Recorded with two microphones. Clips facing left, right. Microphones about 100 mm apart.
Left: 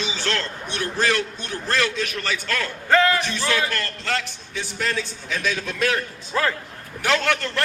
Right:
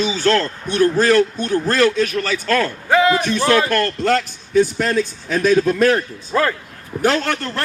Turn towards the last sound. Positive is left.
turn(degrees=-40)  # may be behind; listen again after turning